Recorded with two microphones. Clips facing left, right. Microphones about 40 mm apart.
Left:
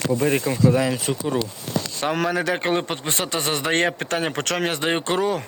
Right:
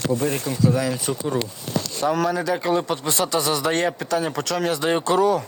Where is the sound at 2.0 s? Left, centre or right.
Left.